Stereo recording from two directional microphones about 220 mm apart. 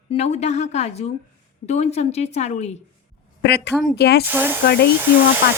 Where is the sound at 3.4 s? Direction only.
50° left (ahead or behind).